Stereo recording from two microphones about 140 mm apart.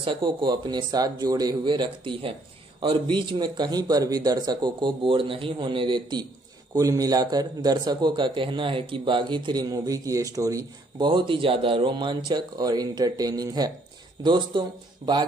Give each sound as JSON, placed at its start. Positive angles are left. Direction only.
{"t": 0.0, "sound": "a man's voice", "side_deg": -35}
{"t": 11.1, "sound": "a man's voice", "side_deg": -35}